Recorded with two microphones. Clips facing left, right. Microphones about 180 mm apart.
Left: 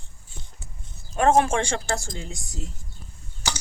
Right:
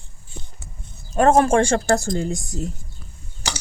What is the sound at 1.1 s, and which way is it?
Speech, 40° right (ahead or behind).